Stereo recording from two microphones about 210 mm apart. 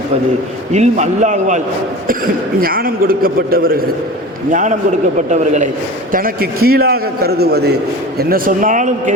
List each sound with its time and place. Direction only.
0.7 s a man's voice: 35° right (ahead or behind)